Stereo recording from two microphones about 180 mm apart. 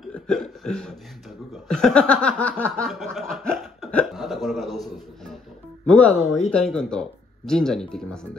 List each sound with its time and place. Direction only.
0.1 s a sound: 5° left (ahead or behind)
1.7 s snicker: 5° left (ahead or behind)
6.5 s speech: 5° left (ahead or behind)
7.9 s snicker: 5° left (ahead or behind)